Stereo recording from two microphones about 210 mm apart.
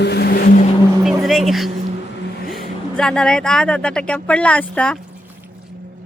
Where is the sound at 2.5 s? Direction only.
Centre (ahead or behind).